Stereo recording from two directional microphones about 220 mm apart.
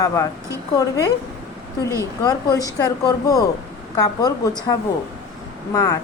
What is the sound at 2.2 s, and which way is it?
A woman's voice, 15° left (ahead or behind).